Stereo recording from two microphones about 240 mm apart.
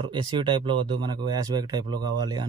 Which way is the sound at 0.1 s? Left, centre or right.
Centre.